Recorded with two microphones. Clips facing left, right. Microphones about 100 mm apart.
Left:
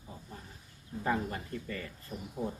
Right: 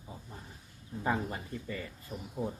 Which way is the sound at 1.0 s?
15° right (ahead or behind).